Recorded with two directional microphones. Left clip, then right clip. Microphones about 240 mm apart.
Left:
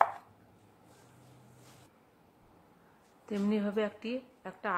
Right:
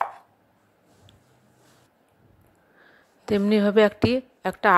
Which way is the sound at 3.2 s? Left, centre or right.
Right.